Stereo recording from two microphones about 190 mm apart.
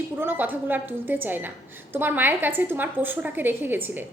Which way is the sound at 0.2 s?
10° right (ahead or behind).